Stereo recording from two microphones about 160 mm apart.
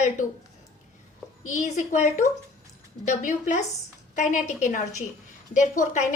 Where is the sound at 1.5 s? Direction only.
45° left (ahead or behind).